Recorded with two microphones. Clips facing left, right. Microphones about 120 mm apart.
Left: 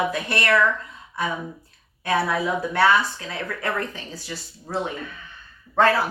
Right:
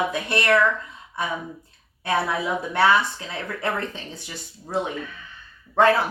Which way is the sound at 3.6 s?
20° right (ahead or behind).